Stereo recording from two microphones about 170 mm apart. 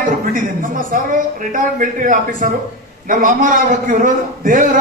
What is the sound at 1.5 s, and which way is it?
A man's voice, 50° right (ahead or behind).